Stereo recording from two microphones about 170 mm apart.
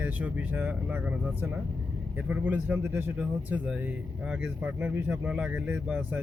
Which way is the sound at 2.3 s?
10° right (ahead or behind).